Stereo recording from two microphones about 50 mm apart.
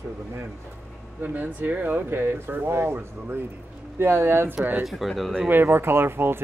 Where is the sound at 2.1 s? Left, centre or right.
Right.